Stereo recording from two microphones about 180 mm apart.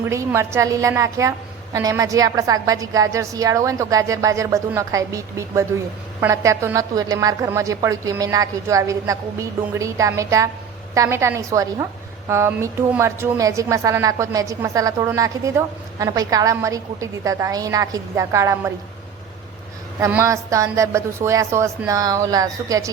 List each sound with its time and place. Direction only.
0.0 s a woman's voice: 15° right (ahead or behind)
20.1 s a woman's voice: 15° right (ahead or behind)